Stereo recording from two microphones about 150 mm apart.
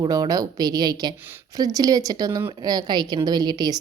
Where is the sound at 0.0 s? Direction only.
25° right (ahead or behind).